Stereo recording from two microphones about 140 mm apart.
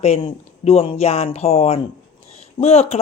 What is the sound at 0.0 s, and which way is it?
Speech, 45° left (ahead or behind).